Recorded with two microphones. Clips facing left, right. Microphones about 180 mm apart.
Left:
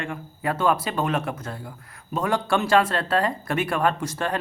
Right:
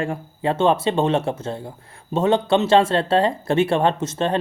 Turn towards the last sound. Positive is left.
turn(degrees=-25)  # may be behind; listen again after turning